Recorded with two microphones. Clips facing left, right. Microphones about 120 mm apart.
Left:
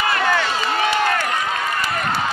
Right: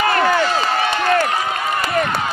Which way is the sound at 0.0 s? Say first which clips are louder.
Right 4 dB; 45° right (ahead or behind).